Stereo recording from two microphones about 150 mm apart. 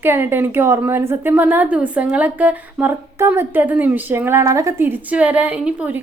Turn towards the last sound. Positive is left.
turn(degrees=-10)  # may be behind; listen again after turning